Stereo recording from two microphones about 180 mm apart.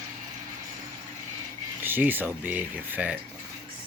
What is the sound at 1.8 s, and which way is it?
Speech, 10° right (ahead or behind).